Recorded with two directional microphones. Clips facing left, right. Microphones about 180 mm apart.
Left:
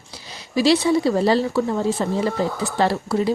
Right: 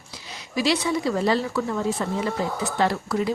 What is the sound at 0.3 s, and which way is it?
Speech, 30° left (ahead or behind).